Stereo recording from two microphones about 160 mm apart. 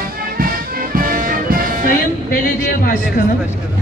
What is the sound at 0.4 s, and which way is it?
Music, 60° right (ahead or behind).